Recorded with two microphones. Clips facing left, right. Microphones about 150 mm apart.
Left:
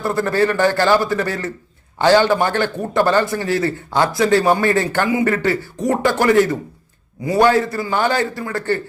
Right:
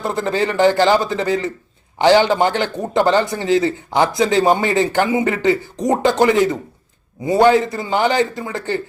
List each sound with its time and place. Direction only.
0.0 s a man's voice: 20° right (ahead or behind)